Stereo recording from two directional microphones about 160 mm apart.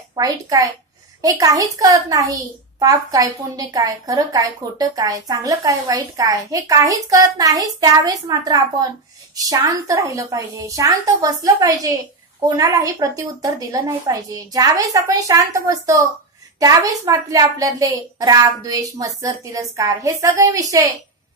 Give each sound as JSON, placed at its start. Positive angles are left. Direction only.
{"t": 0.1, "sound": "a child's voice", "side_deg": -20}